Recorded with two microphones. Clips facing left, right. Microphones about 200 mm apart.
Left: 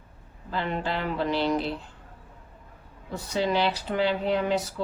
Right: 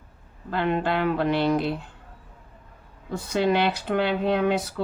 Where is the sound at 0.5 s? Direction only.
55° right (ahead or behind).